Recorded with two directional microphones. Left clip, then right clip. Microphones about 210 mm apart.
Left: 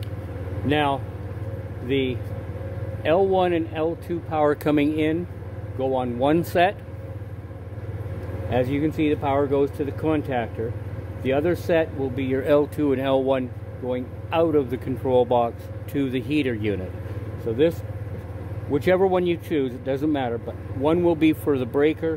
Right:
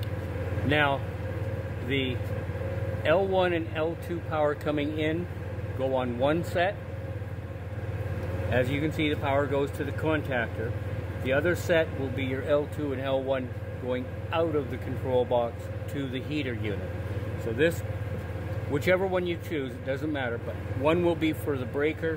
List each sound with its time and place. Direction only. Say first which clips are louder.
0.7 s speech: left 3 dB; 30° left (ahead or behind)
5.8 s speech: left 4 dB; 25° left (ahead or behind)
8.5 s speech: left 5 dB; 35° left (ahead or behind)
18.7 s speech: left 6 dB; 30° left (ahead or behind)